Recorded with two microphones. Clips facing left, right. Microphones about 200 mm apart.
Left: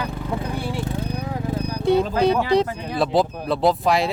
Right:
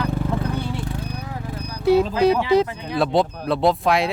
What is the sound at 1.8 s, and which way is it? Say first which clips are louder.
Speech: right 2 dB; 5° right (ahead or behind).